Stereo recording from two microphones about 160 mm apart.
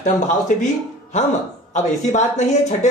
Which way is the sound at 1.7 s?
45° left (ahead or behind).